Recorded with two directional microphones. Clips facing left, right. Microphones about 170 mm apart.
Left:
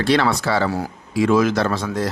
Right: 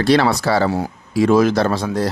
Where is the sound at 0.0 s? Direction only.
35° right (ahead or behind).